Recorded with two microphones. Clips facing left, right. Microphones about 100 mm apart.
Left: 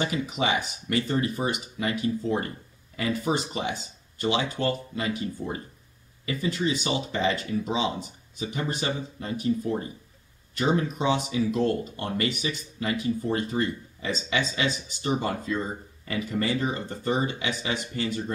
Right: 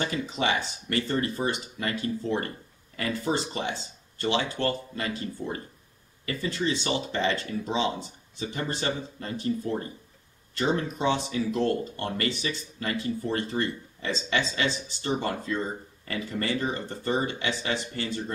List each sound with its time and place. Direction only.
0.0 s speech: 15° left (ahead or behind)